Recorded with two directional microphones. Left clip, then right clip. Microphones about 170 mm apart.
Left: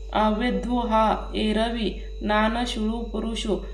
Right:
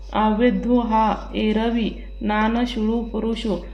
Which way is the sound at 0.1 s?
35° right (ahead or behind).